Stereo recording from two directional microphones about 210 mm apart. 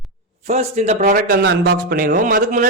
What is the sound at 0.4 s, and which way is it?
A man's voice, 35° right (ahead or behind).